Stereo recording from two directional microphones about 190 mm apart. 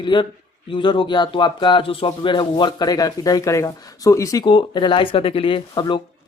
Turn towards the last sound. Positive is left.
turn(degrees=25)  # may be behind; listen again after turning